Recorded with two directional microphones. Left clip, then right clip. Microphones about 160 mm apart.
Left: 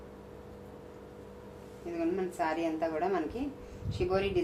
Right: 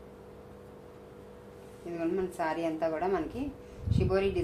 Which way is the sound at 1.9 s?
30° right (ahead or behind).